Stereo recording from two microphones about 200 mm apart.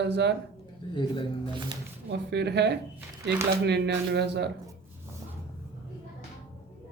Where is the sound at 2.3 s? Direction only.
55° right (ahead or behind).